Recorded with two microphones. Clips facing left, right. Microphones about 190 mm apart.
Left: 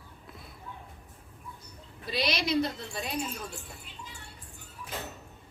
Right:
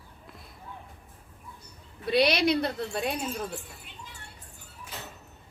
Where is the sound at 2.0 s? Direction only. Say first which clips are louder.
Right 8 dB; 60° right (ahead or behind).